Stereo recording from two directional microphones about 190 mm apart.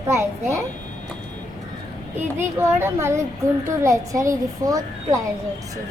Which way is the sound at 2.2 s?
10° right (ahead or behind).